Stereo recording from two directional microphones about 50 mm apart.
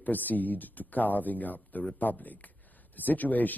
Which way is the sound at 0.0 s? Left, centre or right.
Left.